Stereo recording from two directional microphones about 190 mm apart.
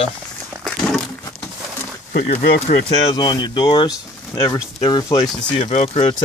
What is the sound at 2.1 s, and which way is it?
Speech, 50° left (ahead or behind).